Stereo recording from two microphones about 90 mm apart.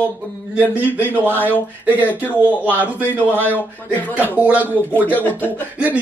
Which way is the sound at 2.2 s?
15° right (ahead or behind).